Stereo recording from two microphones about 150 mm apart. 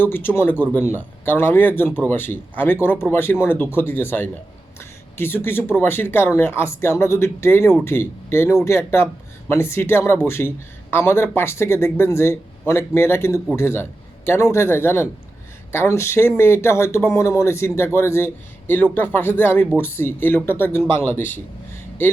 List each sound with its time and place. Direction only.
0.0 s speech: 15° left (ahead or behind)